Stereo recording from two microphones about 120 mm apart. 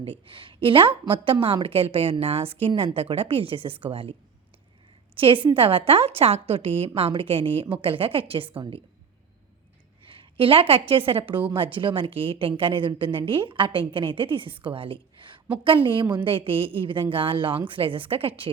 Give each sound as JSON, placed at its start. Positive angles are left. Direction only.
{"t": 0.0, "sound": "a woman's voice", "side_deg": -50}
{"t": 5.1, "sound": "a woman's voice", "side_deg": -45}
{"t": 10.1, "sound": "a woman's voice", "side_deg": -50}